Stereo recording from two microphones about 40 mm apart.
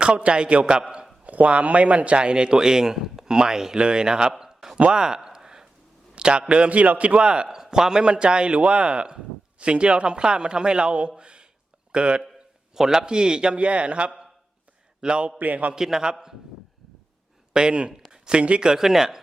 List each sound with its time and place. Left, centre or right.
0.2 s a man's voice: right
1.2 s a man's voice: right; by 4.8 s centre
4.8 s a sound: right
6.5 s a man's voice: right
11.2 s a sound: right
11.9 s speech: right
12.7 s a man's voice: centre
15.4 s a man's voice: right
15.7 s speech: centre
17.5 s a man's voice: right
18.1 s a sound: right
18.6 s speech: centre